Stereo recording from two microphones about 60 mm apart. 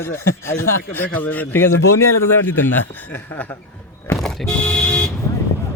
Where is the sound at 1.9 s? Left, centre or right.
Left.